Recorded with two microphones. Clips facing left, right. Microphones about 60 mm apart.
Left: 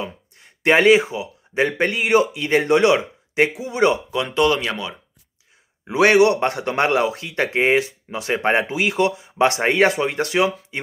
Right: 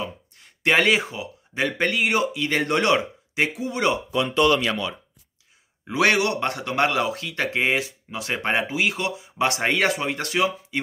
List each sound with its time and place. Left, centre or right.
0.0 s speech: left
1.5 s a man's voice: left
2.6 s speech: centre
4.2 s speech: left
4.6 s a man's voice: left
6.1 s speech: left
8.6 s speech: left